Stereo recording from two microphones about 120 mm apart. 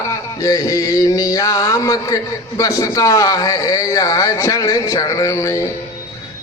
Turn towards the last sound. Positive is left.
turn(degrees=25)  # may be behind; listen again after turning